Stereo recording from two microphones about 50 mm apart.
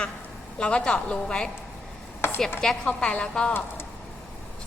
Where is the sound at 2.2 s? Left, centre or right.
Left.